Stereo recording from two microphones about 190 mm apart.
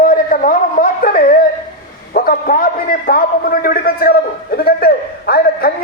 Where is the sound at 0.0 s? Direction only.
45° left (ahead or behind).